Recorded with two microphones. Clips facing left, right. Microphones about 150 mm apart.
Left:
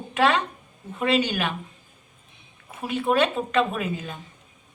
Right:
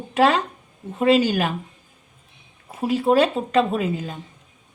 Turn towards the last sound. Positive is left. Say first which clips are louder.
# right 5 dB
turn(degrees=-30)  # may be behind; listen again after turning